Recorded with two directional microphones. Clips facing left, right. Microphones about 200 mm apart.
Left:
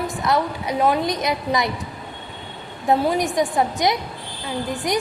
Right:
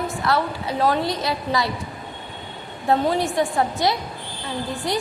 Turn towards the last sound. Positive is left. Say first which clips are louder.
# left 2 dB
turn(degrees=20)  # may be behind; listen again after turning